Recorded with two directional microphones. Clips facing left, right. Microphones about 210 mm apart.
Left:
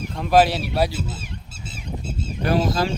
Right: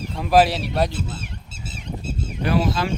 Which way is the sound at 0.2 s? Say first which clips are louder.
Even; centre (ahead or behind).